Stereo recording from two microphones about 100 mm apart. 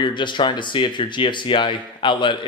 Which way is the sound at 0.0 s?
50° left (ahead or behind).